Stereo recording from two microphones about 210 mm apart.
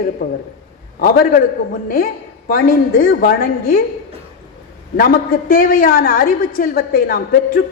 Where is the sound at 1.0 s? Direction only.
45° left (ahead or behind).